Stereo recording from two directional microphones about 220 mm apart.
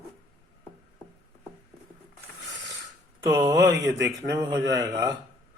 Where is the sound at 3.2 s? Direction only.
15° right (ahead or behind).